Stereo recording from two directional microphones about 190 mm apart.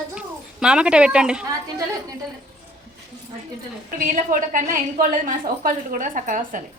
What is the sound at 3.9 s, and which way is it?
A woman's voice, 45° right (ahead or behind).